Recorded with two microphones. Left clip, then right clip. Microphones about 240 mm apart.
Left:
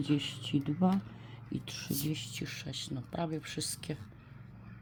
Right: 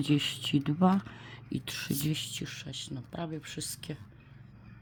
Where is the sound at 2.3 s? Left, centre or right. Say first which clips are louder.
Right 1 dB; centre.